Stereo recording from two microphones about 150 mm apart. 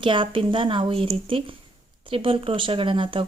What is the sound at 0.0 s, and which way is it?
Speech, 35° right (ahead or behind).